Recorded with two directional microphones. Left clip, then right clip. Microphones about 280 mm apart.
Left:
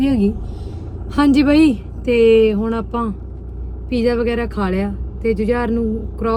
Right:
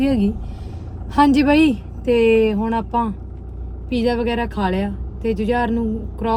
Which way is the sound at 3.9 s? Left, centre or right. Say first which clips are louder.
Left 2 dB; right.